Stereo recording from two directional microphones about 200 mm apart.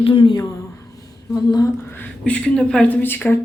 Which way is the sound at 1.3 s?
20° left (ahead or behind).